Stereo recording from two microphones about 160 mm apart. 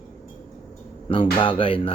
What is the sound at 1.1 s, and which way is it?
Speech, 30° left (ahead or behind).